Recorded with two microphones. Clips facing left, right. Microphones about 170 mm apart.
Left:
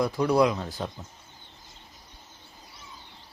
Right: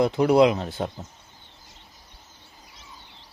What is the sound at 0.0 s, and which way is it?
Speech, 25° right (ahead or behind).